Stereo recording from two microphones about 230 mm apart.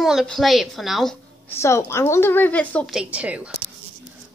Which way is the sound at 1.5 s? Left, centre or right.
Centre.